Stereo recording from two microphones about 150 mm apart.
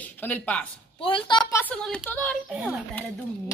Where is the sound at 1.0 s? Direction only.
35° left (ahead or behind).